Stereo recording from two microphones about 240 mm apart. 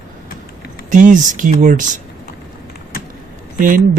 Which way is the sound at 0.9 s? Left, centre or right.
Right.